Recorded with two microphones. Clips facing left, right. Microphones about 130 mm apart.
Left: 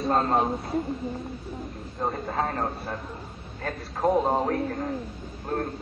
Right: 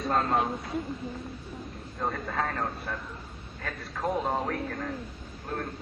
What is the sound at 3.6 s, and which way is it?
Speech, 40° left (ahead or behind).